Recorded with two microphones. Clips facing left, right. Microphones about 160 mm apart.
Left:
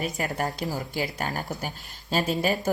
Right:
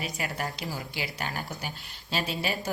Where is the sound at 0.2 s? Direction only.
45° left (ahead or behind).